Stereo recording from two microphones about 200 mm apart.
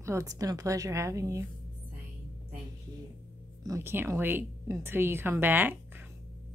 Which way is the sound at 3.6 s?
15° right (ahead or behind).